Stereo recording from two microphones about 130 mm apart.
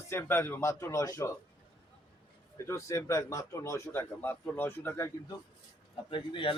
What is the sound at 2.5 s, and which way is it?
Speech, 20° left (ahead or behind).